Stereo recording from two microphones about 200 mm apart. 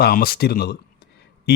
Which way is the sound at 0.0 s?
50° left (ahead or behind).